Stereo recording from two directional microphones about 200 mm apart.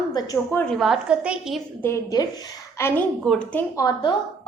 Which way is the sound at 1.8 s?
15° left (ahead or behind).